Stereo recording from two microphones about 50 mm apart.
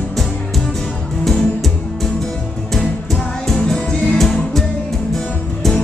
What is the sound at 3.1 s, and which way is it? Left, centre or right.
Music, centre.